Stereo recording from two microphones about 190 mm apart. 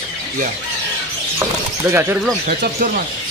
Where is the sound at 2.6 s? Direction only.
45° right (ahead or behind).